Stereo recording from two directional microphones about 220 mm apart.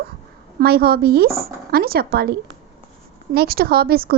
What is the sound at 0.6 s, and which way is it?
A woman's voice, 45° right (ahead or behind).